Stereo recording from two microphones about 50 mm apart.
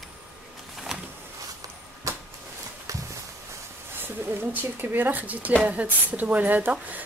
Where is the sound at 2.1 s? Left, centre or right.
Right.